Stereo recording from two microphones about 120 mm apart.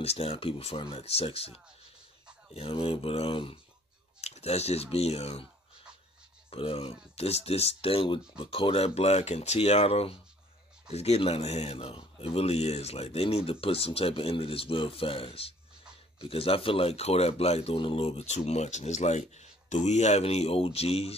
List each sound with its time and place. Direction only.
0.0 s speech: 55° left (ahead or behind)
4.2 s speech: 60° left (ahead or behind)
6.5 s speech: 55° left (ahead or behind)